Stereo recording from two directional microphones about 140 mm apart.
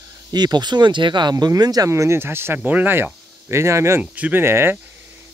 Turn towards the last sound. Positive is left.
turn(degrees=-15)  # may be behind; listen again after turning